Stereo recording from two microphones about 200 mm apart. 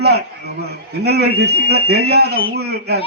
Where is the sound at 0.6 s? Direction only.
55° right (ahead or behind).